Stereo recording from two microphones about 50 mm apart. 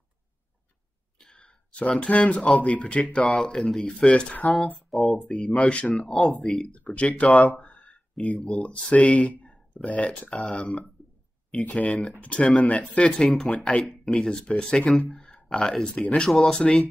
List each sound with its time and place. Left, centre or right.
1.3 s speech: left
4.6 s speech: centre
5.3 s speech: centre
6.2 s speech: centre
6.8 s speech: left
13.2 s speech: centre
16.3 s speech: centre